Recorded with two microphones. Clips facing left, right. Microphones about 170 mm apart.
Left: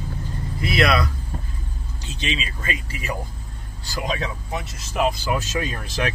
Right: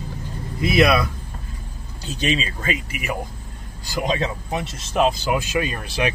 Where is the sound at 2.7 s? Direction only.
20° right (ahead or behind).